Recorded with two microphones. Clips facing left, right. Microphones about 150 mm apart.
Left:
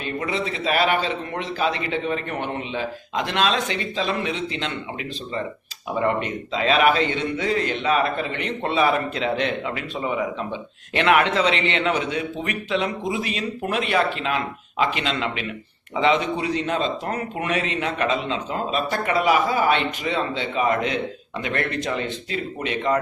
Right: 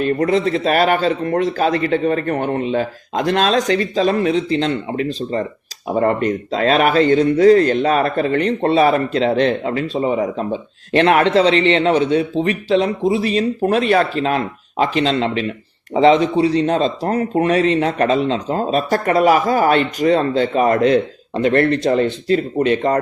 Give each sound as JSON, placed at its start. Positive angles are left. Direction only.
{"t": 0.0, "sound": "a man's voice", "side_deg": -45}